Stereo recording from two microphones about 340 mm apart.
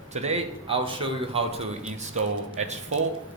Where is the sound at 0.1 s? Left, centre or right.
Centre.